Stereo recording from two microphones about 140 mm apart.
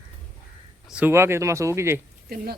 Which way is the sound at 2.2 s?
90° right.